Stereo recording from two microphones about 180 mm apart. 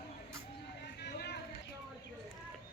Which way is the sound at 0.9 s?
70° left (ahead or behind).